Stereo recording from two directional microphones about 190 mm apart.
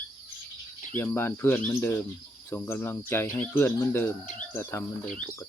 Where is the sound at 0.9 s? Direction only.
10° left (ahead or behind).